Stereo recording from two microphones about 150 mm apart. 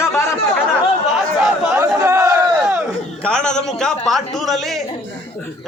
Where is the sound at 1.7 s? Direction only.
15° right (ahead or behind).